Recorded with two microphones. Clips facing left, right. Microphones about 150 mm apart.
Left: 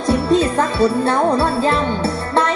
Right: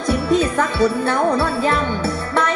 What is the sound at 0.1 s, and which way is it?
Music, 30° left (ahead or behind).